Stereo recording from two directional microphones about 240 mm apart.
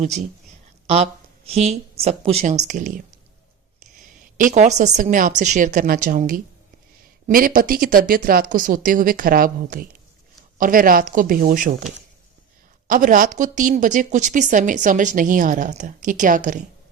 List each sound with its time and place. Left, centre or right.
0.9 s a woman's voice: right
4.4 s a woman's voice: right
12.9 s a woman's voice: right